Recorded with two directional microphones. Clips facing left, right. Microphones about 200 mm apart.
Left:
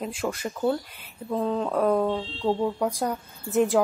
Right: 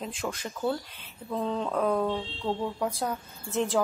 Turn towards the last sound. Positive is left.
turn(degrees=15)  # may be behind; listen again after turning